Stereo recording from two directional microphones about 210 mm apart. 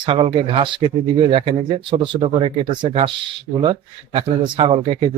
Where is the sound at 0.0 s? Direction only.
25° right (ahead or behind).